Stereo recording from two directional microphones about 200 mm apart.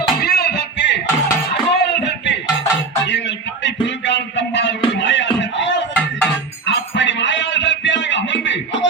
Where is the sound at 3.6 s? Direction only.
65° left (ahead or behind).